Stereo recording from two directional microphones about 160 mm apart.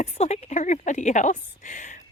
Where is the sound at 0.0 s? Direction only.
45° left (ahead or behind).